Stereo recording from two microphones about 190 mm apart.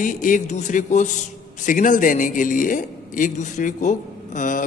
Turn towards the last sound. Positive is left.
turn(degrees=40)  # may be behind; listen again after turning